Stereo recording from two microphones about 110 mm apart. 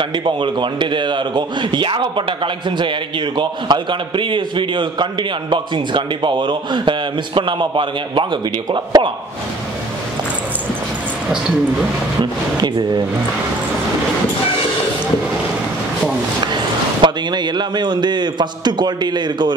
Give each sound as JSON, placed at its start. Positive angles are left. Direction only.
{"t": 0.2, "sound": "a man's voice", "side_deg": -45}
{"t": 12.2, "sound": "a man's voice", "side_deg": -40}
{"t": 17.0, "sound": "a man's voice", "side_deg": -40}